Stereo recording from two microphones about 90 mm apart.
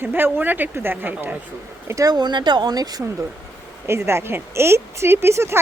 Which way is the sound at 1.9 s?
40° right (ahead or behind).